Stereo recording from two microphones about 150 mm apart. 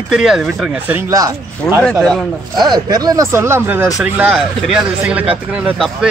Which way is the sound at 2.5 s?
25° right (ahead or behind).